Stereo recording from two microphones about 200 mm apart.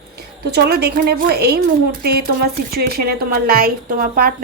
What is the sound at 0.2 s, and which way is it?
A woman's voice, 55° right (ahead or behind).